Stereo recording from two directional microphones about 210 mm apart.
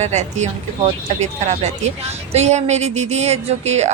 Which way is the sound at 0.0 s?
35° right (ahead or behind).